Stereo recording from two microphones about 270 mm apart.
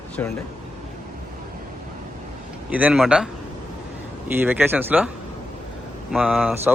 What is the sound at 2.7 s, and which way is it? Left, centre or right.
Speech, centre.